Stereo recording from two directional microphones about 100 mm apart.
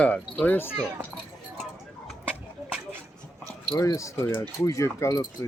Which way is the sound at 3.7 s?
35° left (ahead or behind).